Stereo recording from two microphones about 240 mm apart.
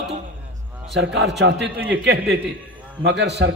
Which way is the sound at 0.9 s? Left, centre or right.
Right.